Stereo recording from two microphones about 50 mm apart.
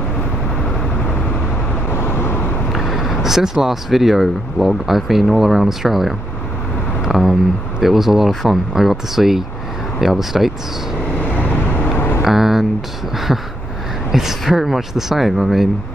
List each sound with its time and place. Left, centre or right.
1.9 s vehicle: left
2.7 s speech: centre
11.1 s vehicle: left
12.2 s a sound: centre
14.1 s speech: centre